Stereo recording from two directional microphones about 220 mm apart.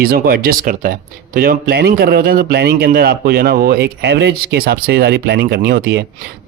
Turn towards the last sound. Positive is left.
turn(degrees=-45)  # may be behind; listen again after turning